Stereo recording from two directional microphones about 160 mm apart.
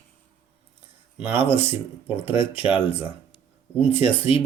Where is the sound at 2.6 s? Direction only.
10° right (ahead or behind).